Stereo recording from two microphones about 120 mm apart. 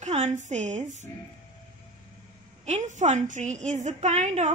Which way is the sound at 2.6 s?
80° right.